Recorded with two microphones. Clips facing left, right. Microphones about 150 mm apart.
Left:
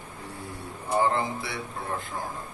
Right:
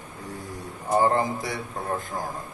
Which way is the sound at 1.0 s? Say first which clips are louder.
Right 3 dB; 40° right (ahead or behind).